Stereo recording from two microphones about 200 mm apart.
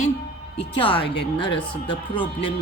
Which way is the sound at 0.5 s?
25° left (ahead or behind).